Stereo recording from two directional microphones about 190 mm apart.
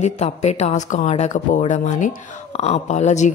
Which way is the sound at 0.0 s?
35° left (ahead or behind).